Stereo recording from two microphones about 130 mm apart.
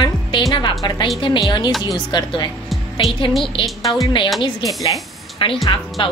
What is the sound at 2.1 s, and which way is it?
Speech, 35° left (ahead or behind).